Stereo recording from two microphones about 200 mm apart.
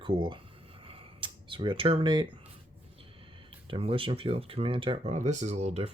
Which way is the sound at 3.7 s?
25° right (ahead or behind).